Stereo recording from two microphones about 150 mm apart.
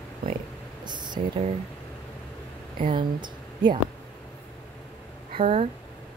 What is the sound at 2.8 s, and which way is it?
Speech, 30° right (ahead or behind).